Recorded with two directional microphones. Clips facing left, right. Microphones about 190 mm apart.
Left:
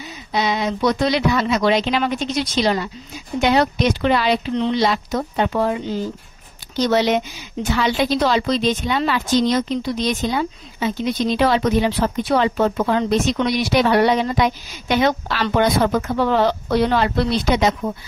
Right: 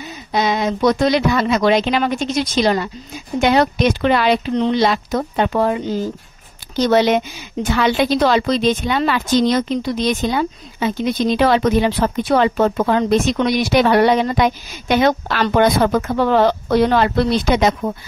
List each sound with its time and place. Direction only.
0.3 s a woman's voice: 50° right (ahead or behind)